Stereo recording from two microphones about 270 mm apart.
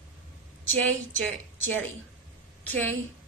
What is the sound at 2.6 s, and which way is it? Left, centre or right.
Speech, centre.